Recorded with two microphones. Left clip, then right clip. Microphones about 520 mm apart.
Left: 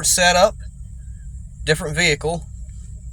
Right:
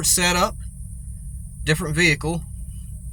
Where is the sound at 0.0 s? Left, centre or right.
Right.